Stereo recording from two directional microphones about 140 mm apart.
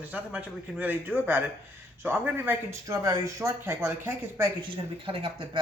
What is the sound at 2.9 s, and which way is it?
Speech, 25° right (ahead or behind).